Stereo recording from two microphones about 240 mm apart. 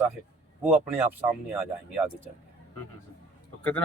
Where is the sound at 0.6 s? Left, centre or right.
Centre.